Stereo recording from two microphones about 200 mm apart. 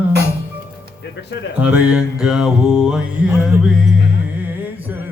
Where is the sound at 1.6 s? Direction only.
5° right (ahead or behind).